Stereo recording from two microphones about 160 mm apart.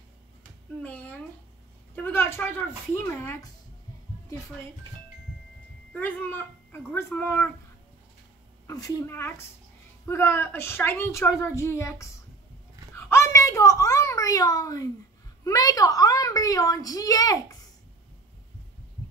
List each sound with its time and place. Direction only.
0.8 s a woman's voice: 10° left (ahead or behind)
5.9 s a woman's voice: 10° left (ahead or behind)
8.6 s a woman's voice: 20° left (ahead or behind)
12.9 s a sound: 15° left (ahead or behind)
15.4 s a woman's voice: 20° left (ahead or behind)